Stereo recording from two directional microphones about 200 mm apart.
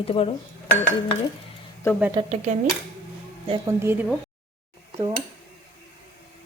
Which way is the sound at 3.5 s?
25° right (ahead or behind).